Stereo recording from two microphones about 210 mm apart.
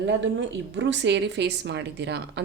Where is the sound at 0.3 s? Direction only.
60° right (ahead or behind).